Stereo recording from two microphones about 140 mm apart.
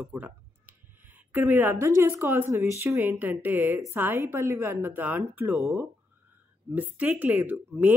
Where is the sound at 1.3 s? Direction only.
15° right (ahead or behind).